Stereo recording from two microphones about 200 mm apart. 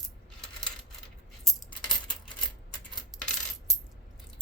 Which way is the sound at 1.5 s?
Centre (ahead or behind).